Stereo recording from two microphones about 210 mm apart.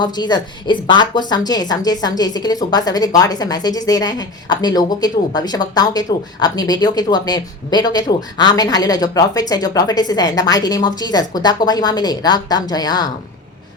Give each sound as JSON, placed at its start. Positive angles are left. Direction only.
{"t": 0.0, "sound": "a woman's voice", "side_deg": 20}